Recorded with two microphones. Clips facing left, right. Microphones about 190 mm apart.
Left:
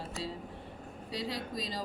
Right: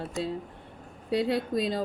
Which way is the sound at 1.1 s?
55° right (ahead or behind).